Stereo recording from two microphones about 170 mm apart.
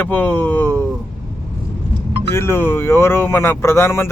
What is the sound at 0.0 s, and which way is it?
Speech, 10° left (ahead or behind).